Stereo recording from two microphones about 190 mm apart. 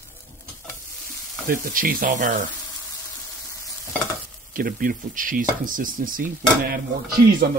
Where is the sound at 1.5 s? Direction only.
50° right (ahead or behind).